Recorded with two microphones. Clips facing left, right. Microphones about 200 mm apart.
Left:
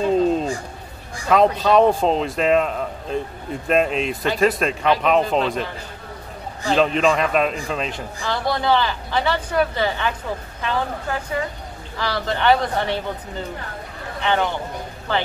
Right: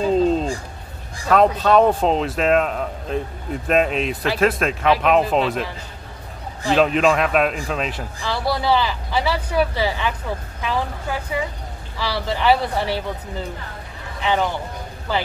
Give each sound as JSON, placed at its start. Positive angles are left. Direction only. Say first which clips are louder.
{"t": 0.0, "sound": "a sound", "louder": "even", "side_deg": 5}
{"t": 1.3, "sound": "a man's voice", "louder": "even", "side_deg": 0}
{"t": 14.2, "sound": "a man's voice", "louder": "even", "side_deg": -5}